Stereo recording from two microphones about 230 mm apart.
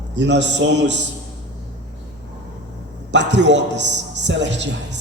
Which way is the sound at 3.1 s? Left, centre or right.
Right.